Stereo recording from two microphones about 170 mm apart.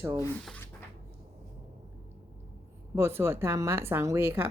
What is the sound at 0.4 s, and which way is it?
Speech, 10° left (ahead or behind).